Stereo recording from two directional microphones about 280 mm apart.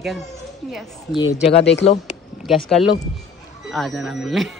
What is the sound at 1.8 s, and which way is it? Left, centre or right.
Speech, left.